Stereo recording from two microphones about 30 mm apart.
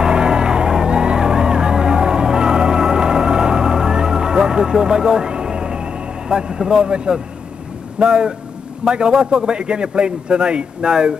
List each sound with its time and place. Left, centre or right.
0.0 s music: right
6.7 s a man's voice: right